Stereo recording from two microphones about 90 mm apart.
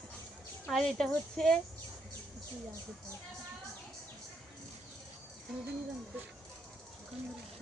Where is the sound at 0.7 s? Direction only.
5° left (ahead or behind).